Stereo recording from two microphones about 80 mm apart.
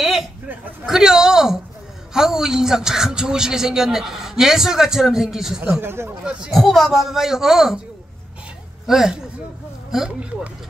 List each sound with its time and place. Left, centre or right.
0.0 s a sound: centre
2.1 s a man's voice: centre
5.6 s speech: right
6.5 s speech: centre
8.8 s speech: centre